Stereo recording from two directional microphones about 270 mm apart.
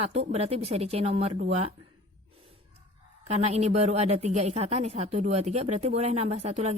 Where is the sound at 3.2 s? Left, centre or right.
Right.